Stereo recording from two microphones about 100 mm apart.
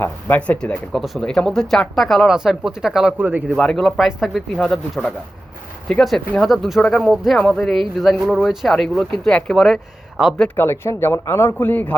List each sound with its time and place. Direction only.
0.0 s speech: 15° left (ahead or behind); by 3.2 s 5° right (ahead or behind)
3.2 s speech: 20° right (ahead or behind)
3.6 s speech: 5° left (ahead or behind)
5.9 s speech: 5° left (ahead or behind)
7.3 s speech: 10° left (ahead or behind)
10.5 s speech: 25° left (ahead or behind)